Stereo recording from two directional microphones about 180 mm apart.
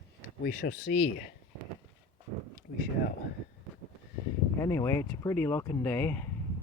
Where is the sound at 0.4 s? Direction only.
55° left (ahead or behind).